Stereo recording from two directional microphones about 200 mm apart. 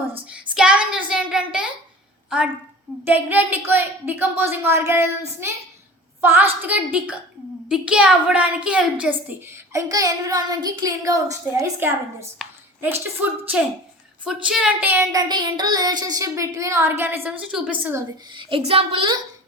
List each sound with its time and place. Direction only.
0.3 s child singing: 5° right (ahead or behind)
3.0 s a woman's voice: 10° right (ahead or behind)
12.4 s a sound: 10° right (ahead or behind)
14.4 s a woman's voice: 5° right (ahead or behind)
18.3 s a woman's voice: 25° right (ahead or behind)